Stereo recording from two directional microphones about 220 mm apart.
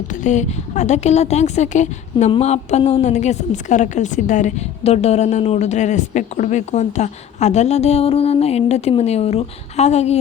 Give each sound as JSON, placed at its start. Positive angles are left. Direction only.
{"t": 0.1, "sound": "a woman's voice", "side_deg": 35}